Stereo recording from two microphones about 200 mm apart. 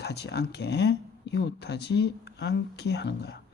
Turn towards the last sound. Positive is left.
turn(degrees=60)  # may be behind; listen again after turning